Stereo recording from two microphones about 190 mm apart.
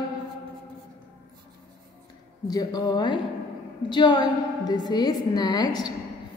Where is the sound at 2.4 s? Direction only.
20° left (ahead or behind).